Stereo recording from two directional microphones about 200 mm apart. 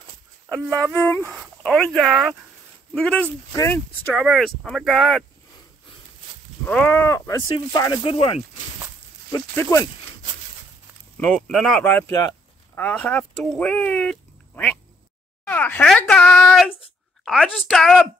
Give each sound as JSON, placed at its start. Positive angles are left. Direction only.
{"t": 0.5, "sound": "speech", "side_deg": 5}
{"t": 4.1, "sound": "speech", "side_deg": 0}
{"t": 6.6, "sound": "speech", "side_deg": 10}
{"t": 9.3, "sound": "speech", "side_deg": 15}
{"t": 11.1, "sound": "speech", "side_deg": 5}